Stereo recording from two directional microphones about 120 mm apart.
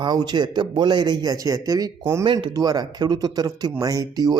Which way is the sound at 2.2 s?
40° right (ahead or behind).